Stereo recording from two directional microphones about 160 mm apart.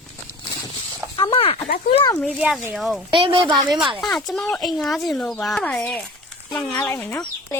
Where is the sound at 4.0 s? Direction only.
5° left (ahead or behind).